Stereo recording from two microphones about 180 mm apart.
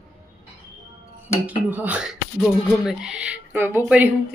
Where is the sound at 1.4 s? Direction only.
10° right (ahead or behind).